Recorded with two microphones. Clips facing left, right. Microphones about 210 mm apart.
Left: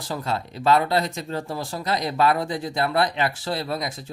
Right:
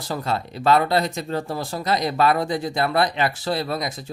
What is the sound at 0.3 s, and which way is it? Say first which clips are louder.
Speech: right 1 dB; 65° right (ahead or behind).